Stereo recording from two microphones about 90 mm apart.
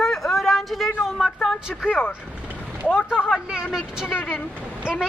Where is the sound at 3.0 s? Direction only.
10° right (ahead or behind).